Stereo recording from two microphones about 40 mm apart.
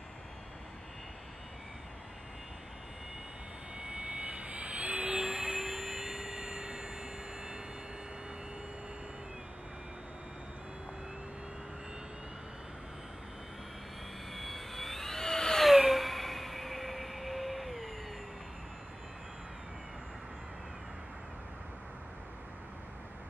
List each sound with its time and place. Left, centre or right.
3.7 s vehicle: centre
5.2 s vehicle: centre
14.3 s jet engine: centre
15.6 s a sound: centre